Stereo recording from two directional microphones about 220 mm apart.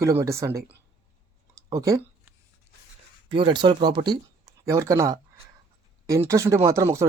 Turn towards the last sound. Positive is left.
turn(degrees=-10)  # may be behind; listen again after turning